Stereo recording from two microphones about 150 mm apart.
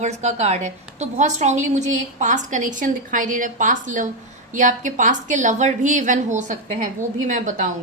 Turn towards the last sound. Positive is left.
turn(degrees=-60)  # may be behind; listen again after turning